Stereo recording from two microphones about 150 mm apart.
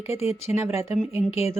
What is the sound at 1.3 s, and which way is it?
Speech, 45° left (ahead or behind).